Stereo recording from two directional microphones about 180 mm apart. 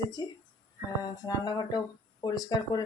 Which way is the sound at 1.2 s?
25° left (ahead or behind).